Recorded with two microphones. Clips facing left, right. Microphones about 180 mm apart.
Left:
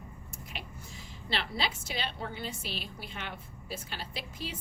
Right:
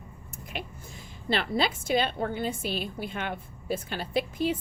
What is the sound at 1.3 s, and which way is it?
A woman's voice, 50° right (ahead or behind).